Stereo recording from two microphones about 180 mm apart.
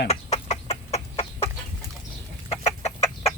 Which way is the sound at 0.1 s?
35° left (ahead or behind).